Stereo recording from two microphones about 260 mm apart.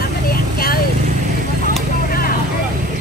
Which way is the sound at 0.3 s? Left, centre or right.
Left.